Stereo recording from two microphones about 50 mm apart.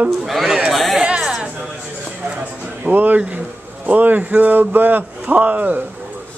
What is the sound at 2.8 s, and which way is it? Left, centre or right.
Speech, right.